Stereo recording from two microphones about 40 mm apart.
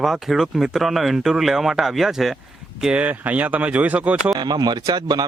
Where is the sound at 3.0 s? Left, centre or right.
Right.